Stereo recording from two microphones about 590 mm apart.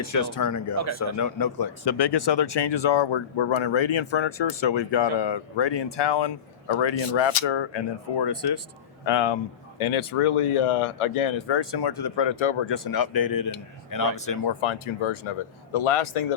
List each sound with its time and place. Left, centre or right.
0.3 s speech: left
14.3 s speech: left